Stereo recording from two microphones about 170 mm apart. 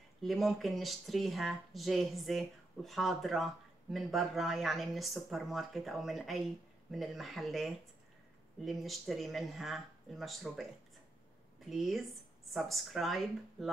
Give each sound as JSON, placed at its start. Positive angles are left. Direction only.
{"t": 0.2, "sound": "speech", "side_deg": 0}